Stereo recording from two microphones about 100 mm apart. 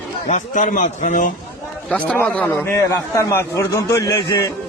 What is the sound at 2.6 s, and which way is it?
A man's voice, 25° left (ahead or behind).